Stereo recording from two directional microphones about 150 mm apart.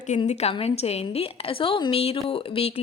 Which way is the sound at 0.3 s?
45° left (ahead or behind).